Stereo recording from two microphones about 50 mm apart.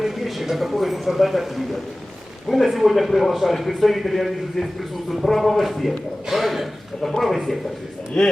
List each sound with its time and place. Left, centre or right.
0.0 s speech: centre
8.1 s speech: centre